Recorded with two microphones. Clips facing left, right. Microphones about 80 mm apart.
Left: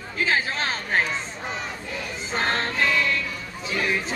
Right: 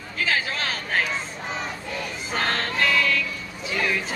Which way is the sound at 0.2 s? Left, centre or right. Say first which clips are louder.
Left 1 dB; left.